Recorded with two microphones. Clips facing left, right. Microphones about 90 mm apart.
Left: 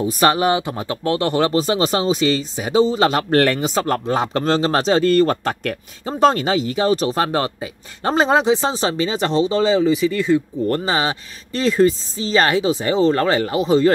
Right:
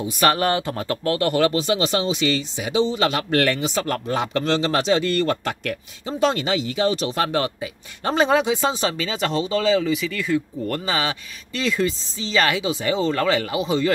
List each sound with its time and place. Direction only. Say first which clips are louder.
0.3 s speech: left 3 dB; 15° left (ahead or behind); by 13.9 s 40° left (ahead or behind)